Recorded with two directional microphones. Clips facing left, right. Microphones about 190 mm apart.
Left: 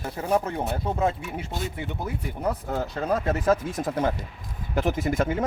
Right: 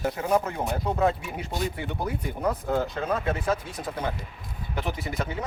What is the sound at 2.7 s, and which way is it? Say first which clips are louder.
Speech: left 1 dB; 35° left (ahead or behind).